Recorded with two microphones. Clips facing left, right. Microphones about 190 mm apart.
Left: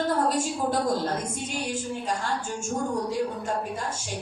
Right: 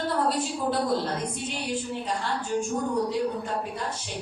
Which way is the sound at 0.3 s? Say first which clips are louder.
Left 1 dB; 45° left (ahead or behind).